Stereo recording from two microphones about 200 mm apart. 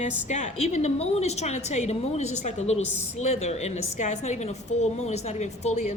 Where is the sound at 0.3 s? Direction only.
35° left (ahead or behind).